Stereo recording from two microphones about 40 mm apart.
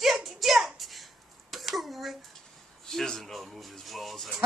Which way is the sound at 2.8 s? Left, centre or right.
Centre.